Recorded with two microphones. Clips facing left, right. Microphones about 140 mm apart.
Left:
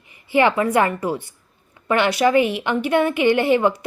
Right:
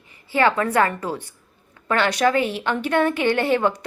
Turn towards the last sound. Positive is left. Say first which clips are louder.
# left 3 dB
turn(degrees=10)  # may be behind; listen again after turning